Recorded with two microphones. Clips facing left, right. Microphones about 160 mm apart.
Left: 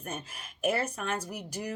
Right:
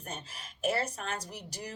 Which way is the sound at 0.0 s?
55° left (ahead or behind).